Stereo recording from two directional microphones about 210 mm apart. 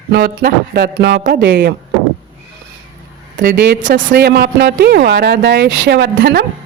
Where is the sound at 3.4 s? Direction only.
50° right (ahead or behind).